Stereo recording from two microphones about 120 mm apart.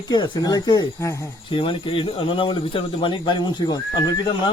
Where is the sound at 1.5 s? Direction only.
45° left (ahead or behind).